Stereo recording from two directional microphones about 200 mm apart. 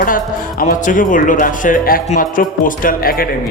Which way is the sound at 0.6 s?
40° left (ahead or behind).